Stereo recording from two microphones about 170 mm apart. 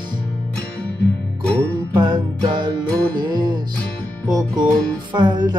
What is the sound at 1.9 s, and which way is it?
Music, 25° right (ahead or behind).